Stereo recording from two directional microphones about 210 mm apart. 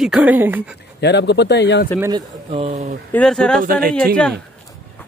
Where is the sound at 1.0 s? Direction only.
55° left (ahead or behind).